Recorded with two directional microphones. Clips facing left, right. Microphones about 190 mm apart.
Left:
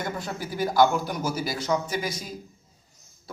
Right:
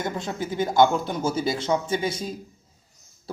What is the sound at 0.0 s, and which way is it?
A man's voice, 20° right (ahead or behind).